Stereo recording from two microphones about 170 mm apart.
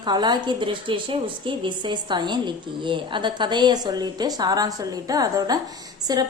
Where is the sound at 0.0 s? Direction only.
25° right (ahead or behind).